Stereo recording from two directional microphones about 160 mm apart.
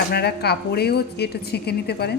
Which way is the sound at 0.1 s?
90° left.